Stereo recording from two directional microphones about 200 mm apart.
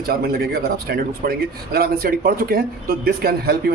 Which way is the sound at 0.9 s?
55° right (ahead or behind).